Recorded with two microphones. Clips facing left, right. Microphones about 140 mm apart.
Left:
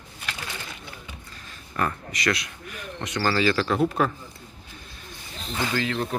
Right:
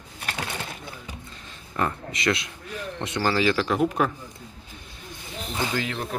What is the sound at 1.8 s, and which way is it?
Speech, 20° right (ahead or behind).